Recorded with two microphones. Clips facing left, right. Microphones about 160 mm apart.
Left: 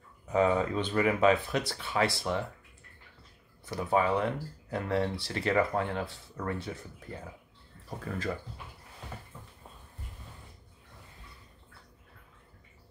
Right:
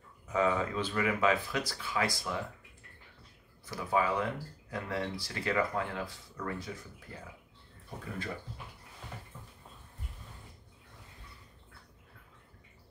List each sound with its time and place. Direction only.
0.3 s speech: 30° left (ahead or behind)
3.6 s speech: 25° left (ahead or behind)
7.9 s speech: 40° left (ahead or behind)